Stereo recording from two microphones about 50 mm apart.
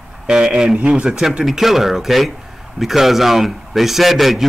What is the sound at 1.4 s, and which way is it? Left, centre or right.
Speech, centre.